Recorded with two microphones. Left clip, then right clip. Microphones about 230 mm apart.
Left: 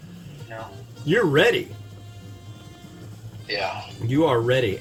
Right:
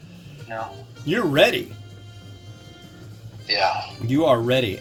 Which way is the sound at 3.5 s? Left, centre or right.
Right.